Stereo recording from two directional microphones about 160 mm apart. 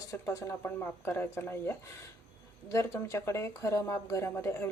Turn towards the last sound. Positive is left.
turn(degrees=15)  # may be behind; listen again after turning